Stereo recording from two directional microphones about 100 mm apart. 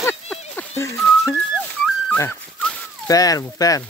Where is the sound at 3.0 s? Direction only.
40° left (ahead or behind).